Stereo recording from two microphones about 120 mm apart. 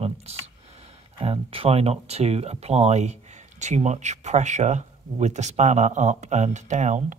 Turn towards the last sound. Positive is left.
turn(degrees=-85)